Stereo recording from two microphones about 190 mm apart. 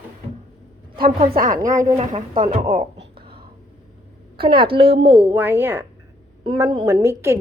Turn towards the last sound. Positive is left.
turn(degrees=-15)  # may be behind; listen again after turning